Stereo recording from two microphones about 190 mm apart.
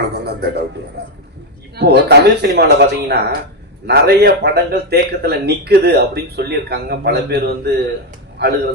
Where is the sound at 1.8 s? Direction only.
60° right (ahead or behind).